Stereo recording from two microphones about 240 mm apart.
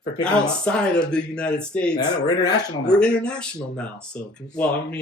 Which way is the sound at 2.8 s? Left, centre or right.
Centre.